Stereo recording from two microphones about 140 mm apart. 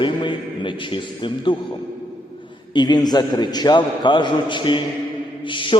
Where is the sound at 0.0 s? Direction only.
35° left (ahead or behind).